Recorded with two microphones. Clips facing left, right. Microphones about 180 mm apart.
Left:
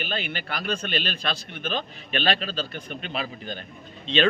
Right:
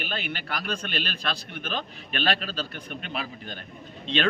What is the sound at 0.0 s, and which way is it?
Speech, 5° right (ahead or behind).